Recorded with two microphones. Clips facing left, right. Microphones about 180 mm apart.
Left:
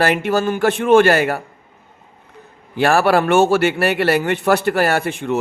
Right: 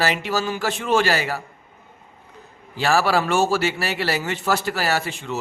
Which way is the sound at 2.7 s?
55° left (ahead or behind).